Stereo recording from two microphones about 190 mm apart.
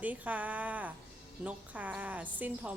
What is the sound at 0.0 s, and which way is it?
A woman's voice, 10° right (ahead or behind).